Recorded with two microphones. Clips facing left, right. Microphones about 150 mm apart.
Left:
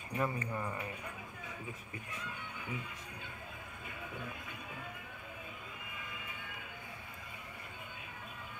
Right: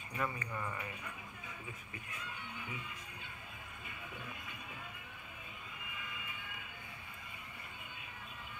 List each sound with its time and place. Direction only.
0.2 s speech: 25° left (ahead or behind)